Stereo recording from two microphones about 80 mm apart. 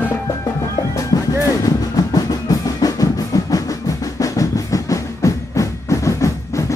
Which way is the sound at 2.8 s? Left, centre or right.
Left.